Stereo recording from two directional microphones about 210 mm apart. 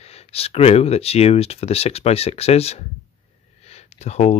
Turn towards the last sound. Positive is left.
turn(degrees=30)  # may be behind; listen again after turning